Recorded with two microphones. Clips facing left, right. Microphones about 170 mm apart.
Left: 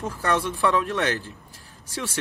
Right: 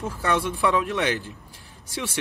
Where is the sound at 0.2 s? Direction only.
15° right (ahead or behind).